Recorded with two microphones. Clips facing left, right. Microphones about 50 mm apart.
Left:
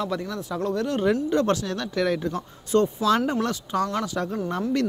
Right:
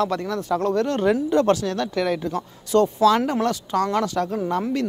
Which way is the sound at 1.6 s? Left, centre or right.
Centre.